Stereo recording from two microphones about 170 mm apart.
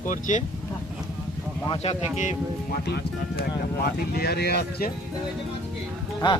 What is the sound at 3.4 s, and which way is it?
Speech, 70° left (ahead or behind).